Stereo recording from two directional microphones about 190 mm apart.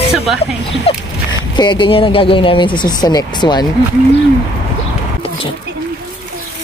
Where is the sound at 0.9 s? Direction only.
30° left (ahead or behind).